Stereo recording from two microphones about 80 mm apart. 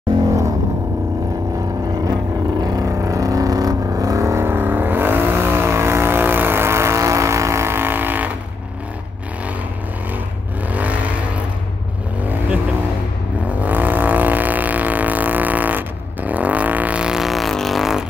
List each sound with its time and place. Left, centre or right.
2.6 s vehicle: right
10.7 s vehicle: centre
12.2 s vehicle: right; by 18.0 s centre